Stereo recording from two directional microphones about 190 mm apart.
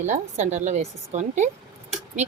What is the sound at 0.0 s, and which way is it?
Speech, 40° right (ahead or behind).